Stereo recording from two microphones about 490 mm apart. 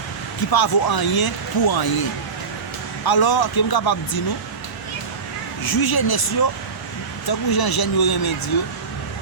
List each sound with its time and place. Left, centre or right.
0.5 s speech: left
5.6 s speech: left